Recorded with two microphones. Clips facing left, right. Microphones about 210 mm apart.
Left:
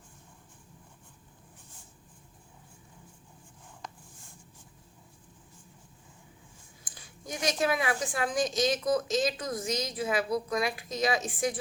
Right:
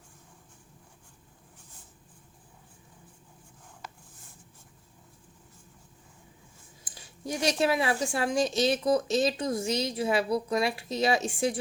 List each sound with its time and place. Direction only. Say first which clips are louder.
6.9 s speech: right 6 dB; 30° right (ahead or behind)